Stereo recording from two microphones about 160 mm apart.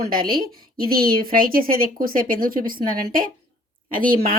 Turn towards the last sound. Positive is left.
turn(degrees=-60)  # may be behind; listen again after turning